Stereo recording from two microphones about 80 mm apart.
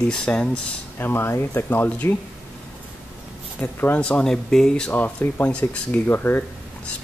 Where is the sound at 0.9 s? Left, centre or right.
Left.